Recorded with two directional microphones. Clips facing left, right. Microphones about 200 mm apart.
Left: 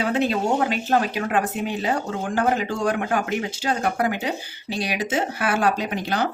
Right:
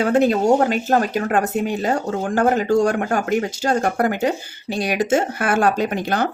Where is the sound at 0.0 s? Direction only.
45° right (ahead or behind).